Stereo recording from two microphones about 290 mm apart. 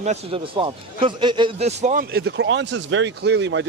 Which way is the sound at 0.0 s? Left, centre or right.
Right.